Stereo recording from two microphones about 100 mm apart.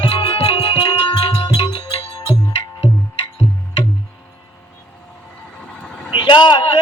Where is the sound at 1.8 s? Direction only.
90° left.